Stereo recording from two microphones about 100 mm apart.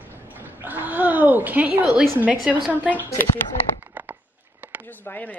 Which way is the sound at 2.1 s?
15° right (ahead or behind).